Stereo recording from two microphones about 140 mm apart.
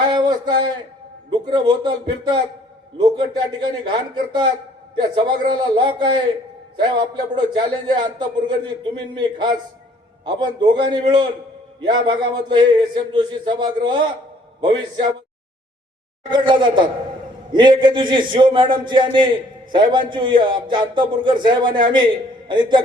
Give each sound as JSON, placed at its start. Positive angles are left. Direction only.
{"t": 0.1, "sound": "a sound", "side_deg": -30}
{"t": 1.3, "sound": "a man's voice", "side_deg": -35}
{"t": 16.3, "sound": "a man's voice", "side_deg": -35}